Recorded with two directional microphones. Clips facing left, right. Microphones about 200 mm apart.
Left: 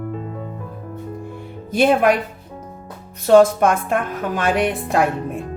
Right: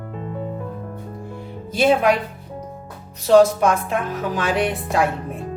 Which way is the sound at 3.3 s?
55° left (ahead or behind).